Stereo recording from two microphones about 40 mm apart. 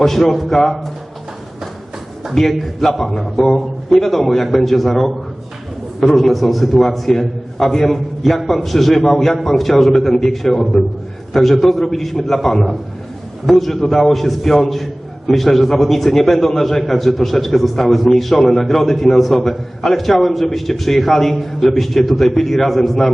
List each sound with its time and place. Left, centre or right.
0.0 s a man's voice: centre
2.3 s a man's voice: centre